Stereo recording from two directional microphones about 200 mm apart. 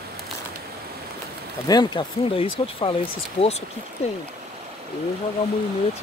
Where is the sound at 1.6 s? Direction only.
20° left (ahead or behind).